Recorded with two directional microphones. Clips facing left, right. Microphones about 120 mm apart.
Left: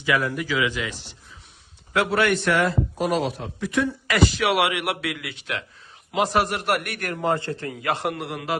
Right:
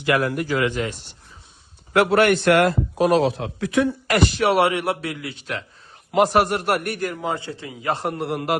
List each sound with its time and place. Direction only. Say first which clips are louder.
0.0 s speech: right 3 dB; 55° right (ahead or behind)
1.9 s a man's voice: right 5 dB; 60° right (ahead or behind); by 3.9 s 90° right
4.0 s a man's voice: right 2 dB; 40° right (ahead or behind)
6.1 s speech: right 4 dB; 50° right (ahead or behind); by 7.0 s 35° right (ahead or behind)
7.2 s a man's voice: left 3 dB; centre (ahead or behind)
7.6 s a man's voice: left 3 dB; 15° right (ahead or behind)
7.9 s a man's voice: right 3 dB; 30° right (ahead or behind)